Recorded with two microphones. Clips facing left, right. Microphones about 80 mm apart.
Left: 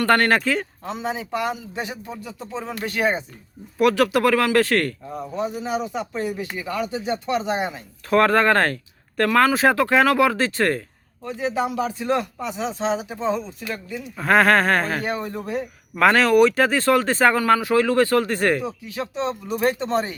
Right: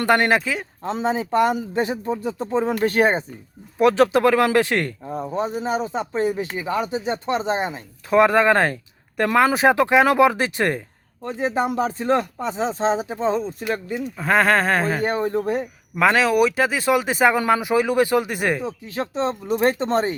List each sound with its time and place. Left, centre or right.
0.0 s speech: centre
0.9 s speech: right
3.8 s speech: right
5.1 s speech: right
8.1 s speech: centre
11.3 s speech: right
11.8 s speech: right
14.2 s a sound: centre
15.0 s speech: right
16.0 s speech: centre
18.6 s speech: right